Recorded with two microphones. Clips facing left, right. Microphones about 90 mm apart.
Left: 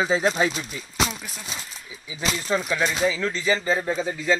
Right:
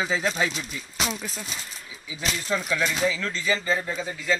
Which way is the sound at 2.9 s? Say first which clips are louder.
Left 2 dB; 20° left (ahead or behind).